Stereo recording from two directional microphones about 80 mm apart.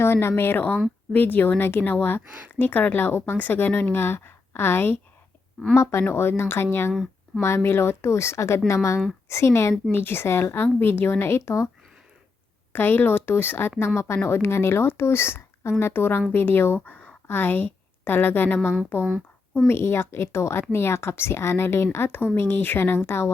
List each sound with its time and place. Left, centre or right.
0.0 s a woman's voice: left
12.7 s a woman's voice: left
19.0 s a sound: centre
19.6 s a woman's voice: left